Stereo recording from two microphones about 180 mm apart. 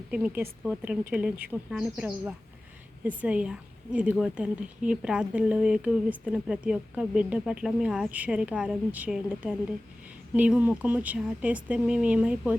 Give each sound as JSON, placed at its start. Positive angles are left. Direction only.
{"t": 0.1, "sound": "a woman's voice", "side_deg": -5}